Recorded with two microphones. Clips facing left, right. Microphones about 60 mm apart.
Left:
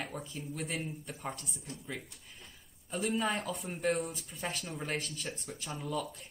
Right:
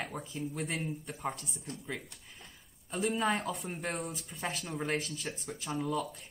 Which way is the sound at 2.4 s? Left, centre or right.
Centre.